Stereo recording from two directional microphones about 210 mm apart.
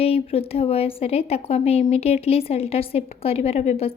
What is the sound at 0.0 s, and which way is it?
A woman's voice, 30° left (ahead or behind).